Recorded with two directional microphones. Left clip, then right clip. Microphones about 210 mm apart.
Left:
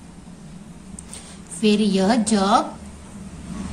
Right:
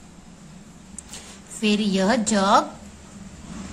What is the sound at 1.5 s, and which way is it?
A woman's voice, 35° right (ahead or behind).